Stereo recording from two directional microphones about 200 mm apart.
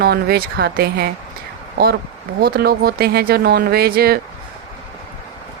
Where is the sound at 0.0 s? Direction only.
50° right (ahead or behind).